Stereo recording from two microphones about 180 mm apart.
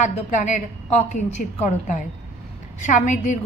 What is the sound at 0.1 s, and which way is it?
A woman's voice, 40° left (ahead or behind).